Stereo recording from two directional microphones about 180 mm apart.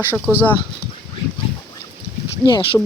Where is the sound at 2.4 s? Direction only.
25° left (ahead or behind).